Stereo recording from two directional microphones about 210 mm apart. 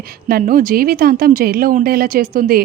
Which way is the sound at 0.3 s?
45° right (ahead or behind).